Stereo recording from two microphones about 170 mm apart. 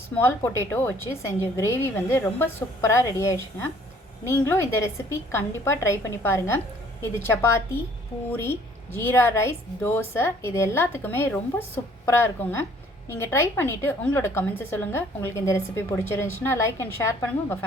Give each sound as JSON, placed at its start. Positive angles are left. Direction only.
{"t": 0.2, "sound": "a woman's voice", "side_deg": 15}